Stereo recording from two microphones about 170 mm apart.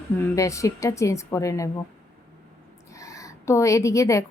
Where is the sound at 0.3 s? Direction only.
20° left (ahead or behind).